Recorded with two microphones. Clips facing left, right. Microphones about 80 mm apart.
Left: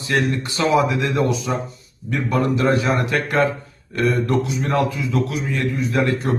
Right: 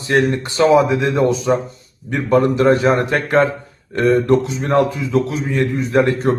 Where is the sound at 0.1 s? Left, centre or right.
Right.